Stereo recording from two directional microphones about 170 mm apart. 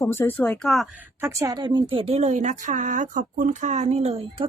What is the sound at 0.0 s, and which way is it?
Speech, 10° left (ahead or behind).